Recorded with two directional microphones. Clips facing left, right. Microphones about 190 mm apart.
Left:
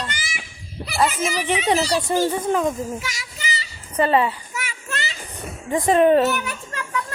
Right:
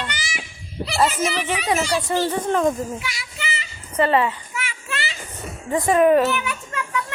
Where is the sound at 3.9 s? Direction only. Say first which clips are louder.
Even; 15° left (ahead or behind).